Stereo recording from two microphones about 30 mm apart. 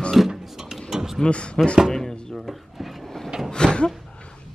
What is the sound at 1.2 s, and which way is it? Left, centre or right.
Speech, left.